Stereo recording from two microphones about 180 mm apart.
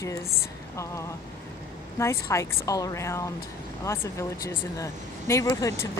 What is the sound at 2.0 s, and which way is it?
Speech, 15° left (ahead or behind).